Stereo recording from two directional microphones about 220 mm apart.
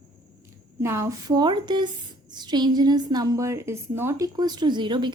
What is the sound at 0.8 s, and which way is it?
A woman's voice, 15° right (ahead or behind).